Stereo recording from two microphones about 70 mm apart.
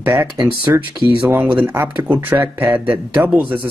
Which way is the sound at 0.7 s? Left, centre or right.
Right.